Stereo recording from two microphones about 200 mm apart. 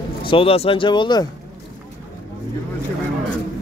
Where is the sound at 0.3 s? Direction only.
30° left (ahead or behind).